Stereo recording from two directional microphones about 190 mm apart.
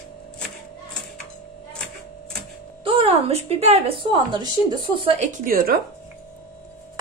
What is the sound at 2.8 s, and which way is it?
A woman's voice, 30° right (ahead or behind).